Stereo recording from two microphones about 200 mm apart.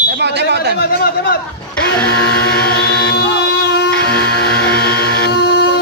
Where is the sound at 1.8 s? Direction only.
5° left (ahead or behind).